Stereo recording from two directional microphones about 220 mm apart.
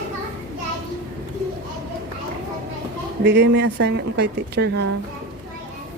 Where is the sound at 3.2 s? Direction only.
50° right (ahead or behind).